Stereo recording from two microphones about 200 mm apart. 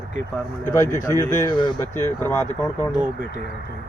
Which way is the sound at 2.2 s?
10° left (ahead or behind).